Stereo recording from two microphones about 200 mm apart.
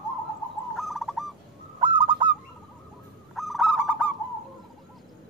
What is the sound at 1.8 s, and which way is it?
Owl, 25° right (ahead or behind).